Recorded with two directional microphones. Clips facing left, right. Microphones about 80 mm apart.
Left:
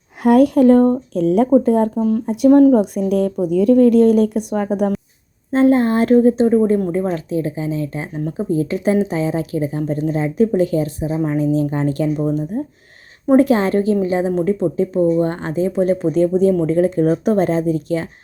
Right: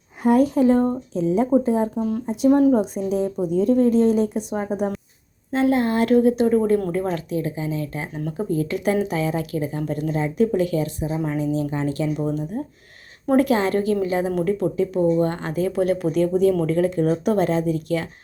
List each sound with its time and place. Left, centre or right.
0.2 s a woman's voice: left
5.5 s a woman's voice: left
8.1 s speech: centre
8.5 s a woman's voice: left
11.3 s a woman's voice: left